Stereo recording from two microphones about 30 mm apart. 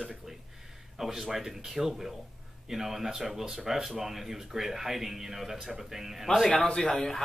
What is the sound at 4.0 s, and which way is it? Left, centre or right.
Speech, centre.